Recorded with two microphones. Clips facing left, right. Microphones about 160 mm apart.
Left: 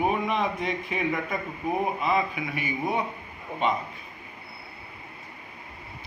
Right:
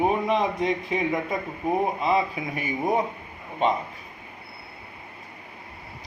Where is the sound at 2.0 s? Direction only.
30° right (ahead or behind).